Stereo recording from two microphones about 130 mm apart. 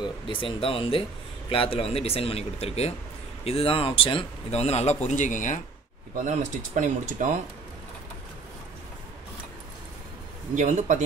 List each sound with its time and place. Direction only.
0.0 s speech: 40° left (ahead or behind); by 5.6 s 80° left
6.1 s speech: 80° right
10.5 s speech: 70° right (ahead or behind)